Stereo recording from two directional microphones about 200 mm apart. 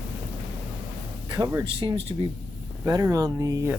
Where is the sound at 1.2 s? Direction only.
20° right (ahead or behind).